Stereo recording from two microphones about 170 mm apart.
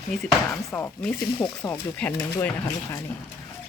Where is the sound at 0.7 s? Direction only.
10° left (ahead or behind).